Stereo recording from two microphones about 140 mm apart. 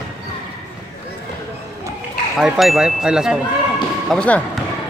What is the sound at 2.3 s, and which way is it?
Speech, centre (ahead or behind).